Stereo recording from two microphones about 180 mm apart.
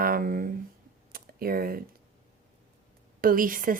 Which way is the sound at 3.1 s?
50° right (ahead or behind).